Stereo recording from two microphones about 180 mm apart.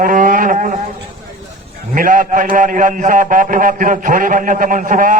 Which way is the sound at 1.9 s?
50° right (ahead or behind).